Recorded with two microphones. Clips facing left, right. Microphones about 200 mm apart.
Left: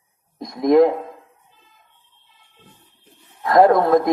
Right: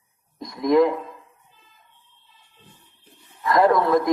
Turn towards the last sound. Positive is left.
turn(degrees=55)  # may be behind; listen again after turning